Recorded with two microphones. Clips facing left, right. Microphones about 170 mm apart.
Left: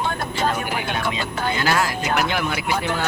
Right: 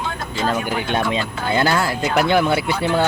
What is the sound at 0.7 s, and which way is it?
Speech, 35° right (ahead or behind).